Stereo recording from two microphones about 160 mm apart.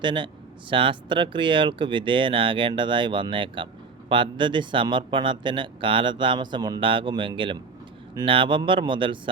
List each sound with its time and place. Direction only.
0.0 s speech: 30° right (ahead or behind)